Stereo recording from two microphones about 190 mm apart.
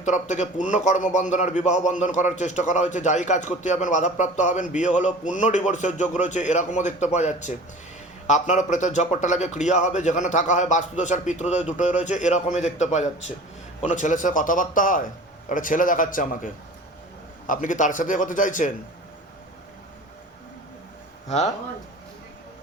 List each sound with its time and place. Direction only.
0.0 s a man's voice: 40° left (ahead or behind)
21.2 s speech: 35° left (ahead or behind)